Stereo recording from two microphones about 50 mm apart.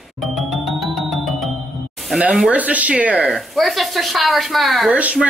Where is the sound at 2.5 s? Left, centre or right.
Right.